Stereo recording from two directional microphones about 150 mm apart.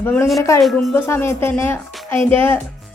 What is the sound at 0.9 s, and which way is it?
Speech, 15° left (ahead or behind).